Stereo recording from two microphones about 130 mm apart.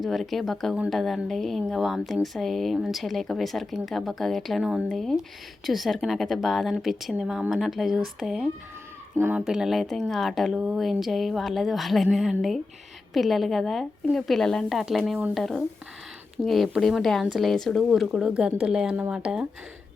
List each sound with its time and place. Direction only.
0.0 s speech: centre (ahead or behind)
9.1 s speech: 15° right (ahead or behind)
9.4 s speech: 5° right (ahead or behind)